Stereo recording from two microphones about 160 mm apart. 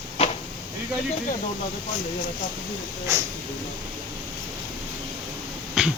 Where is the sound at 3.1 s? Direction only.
20° right (ahead or behind).